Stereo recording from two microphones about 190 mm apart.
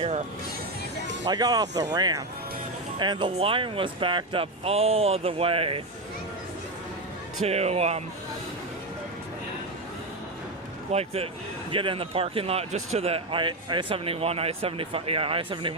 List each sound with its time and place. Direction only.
1.2 s speech: 20° right (ahead or behind)
7.4 s speech: 35° right (ahead or behind)
10.9 s speech: 30° right (ahead or behind)